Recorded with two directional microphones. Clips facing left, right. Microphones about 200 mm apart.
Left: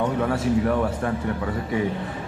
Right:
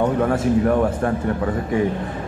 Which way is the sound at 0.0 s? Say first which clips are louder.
Right 4 dB; 50° right (ahead or behind).